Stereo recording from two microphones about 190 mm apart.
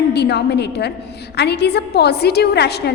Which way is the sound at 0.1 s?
60° left (ahead or behind).